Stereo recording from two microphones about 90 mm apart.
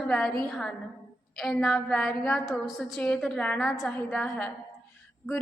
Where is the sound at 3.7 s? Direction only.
Centre (ahead or behind).